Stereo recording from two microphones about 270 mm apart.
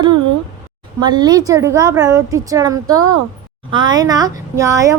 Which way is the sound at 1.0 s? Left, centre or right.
Centre.